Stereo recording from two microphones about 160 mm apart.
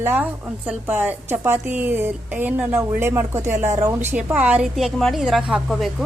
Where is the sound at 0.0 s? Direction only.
10° right (ahead or behind).